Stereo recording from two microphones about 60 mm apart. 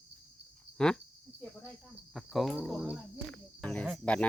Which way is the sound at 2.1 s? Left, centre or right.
Centre.